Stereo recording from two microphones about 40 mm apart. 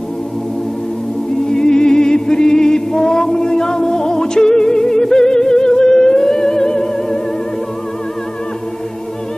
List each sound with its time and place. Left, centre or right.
1.5 s music: centre